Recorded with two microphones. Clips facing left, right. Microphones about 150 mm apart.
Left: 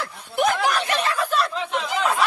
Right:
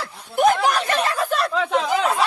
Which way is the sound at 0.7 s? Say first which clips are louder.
Right 2 dB; 45° right (ahead or behind).